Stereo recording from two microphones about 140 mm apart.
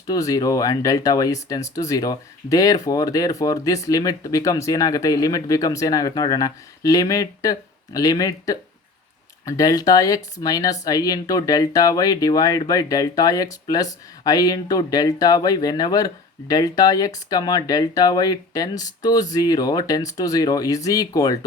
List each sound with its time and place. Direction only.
0.1 s speech: 25° left (ahead or behind)